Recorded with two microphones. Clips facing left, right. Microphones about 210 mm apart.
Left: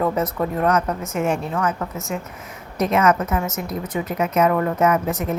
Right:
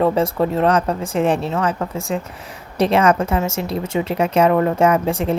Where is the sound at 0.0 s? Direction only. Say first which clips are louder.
Right 5 dB; 30° right (ahead or behind).